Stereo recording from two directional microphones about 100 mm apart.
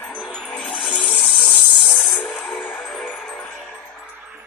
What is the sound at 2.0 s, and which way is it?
Music, centre (ahead or behind).